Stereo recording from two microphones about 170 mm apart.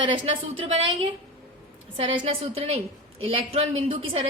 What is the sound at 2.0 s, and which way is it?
A woman's voice, 35° right (ahead or behind).